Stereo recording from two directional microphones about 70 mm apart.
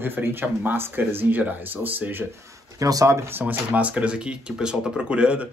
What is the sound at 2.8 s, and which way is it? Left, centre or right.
Speech, right.